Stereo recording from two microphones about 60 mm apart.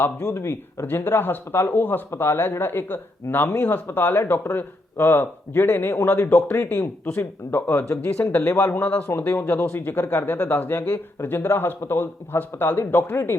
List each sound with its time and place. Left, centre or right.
0.3 s speech: left
8.2 s speech: left
9.1 s speech: left